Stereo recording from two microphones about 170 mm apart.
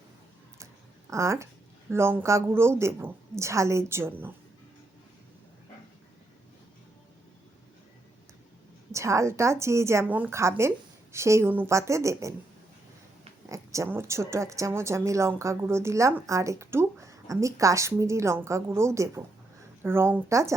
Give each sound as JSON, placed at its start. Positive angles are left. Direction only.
{"t": 1.1, "sound": "speech", "side_deg": -15}
{"t": 8.9, "sound": "speech", "side_deg": -15}
{"t": 13.5, "sound": "speech", "side_deg": -20}